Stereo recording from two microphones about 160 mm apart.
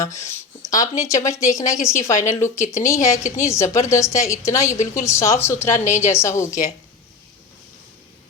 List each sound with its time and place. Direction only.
0.0 s a woman's voice: 20° left (ahead or behind)